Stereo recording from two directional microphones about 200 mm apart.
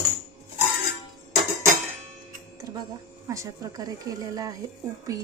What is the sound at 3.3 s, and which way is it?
Music, 15° right (ahead or behind).